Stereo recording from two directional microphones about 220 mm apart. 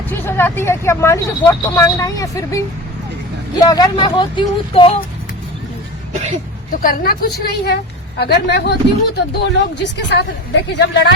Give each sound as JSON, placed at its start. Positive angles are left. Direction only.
{"t": 0.1, "sound": "speech", "side_deg": 10}
{"t": 6.8, "sound": "speech", "side_deg": 40}